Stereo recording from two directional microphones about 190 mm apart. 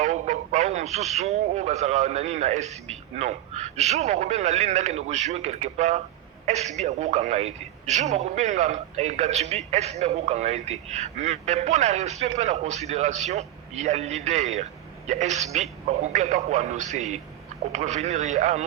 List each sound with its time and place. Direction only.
0.0 s a man's voice: 35° right (ahead or behind)